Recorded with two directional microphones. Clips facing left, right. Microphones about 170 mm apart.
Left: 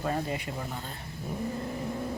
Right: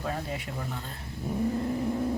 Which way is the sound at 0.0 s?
Centre (ahead or behind).